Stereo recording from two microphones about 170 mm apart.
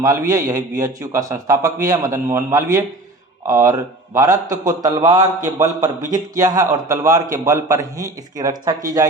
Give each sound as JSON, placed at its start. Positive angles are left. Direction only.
{"t": 0.0, "sound": "a man's voice", "side_deg": -20}